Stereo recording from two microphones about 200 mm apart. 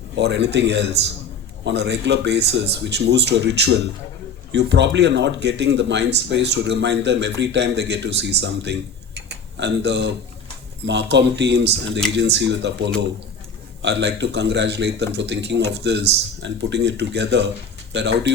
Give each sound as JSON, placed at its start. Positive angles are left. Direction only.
{"t": 0.2, "sound": "speech", "side_deg": -60}
{"t": 9.1, "sound": "a sound", "side_deg": -60}
{"t": 10.8, "sound": "speech", "side_deg": -60}